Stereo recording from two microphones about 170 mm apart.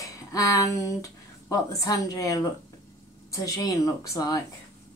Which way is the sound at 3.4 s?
20° left (ahead or behind).